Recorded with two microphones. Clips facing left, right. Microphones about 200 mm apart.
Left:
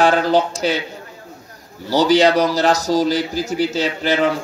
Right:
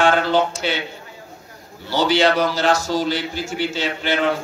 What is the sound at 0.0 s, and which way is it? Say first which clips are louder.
Speech: left 2 dB; 40° left (ahead or behind).